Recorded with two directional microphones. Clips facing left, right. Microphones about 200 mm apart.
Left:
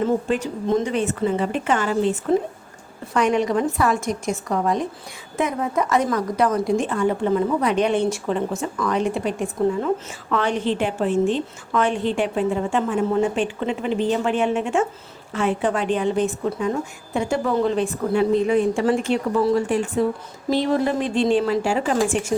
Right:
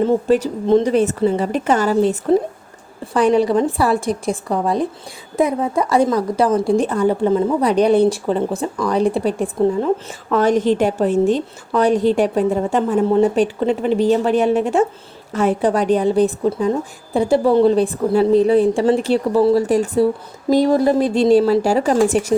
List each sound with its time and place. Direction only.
0.0 s speech: 40° right (ahead or behind)